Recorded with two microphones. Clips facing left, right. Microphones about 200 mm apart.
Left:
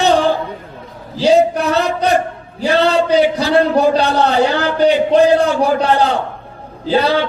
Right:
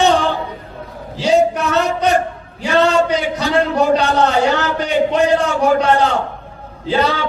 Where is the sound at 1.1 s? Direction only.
35° left (ahead or behind).